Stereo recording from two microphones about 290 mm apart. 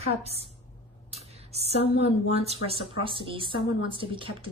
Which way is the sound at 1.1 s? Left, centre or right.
Right.